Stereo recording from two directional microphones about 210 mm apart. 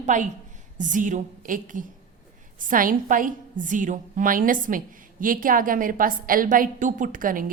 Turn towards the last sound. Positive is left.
turn(degrees=-40)  # may be behind; listen again after turning